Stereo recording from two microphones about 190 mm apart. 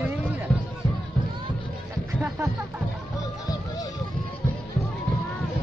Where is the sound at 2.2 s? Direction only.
10° right (ahead or behind).